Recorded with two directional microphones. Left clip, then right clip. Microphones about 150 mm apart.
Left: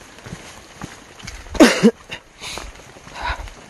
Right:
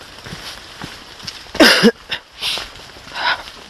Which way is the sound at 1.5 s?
15° left (ahead or behind).